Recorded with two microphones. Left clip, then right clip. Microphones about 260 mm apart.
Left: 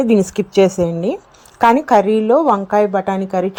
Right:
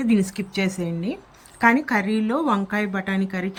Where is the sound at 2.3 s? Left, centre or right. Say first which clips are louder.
Left 10 dB; centre.